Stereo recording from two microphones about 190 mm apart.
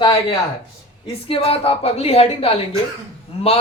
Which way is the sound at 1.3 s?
30° left (ahead or behind).